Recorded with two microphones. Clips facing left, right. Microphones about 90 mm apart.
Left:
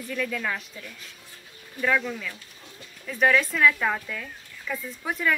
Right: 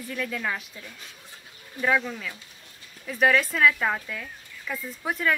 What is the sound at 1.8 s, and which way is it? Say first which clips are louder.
Speech: even; 10° right (ahead or behind).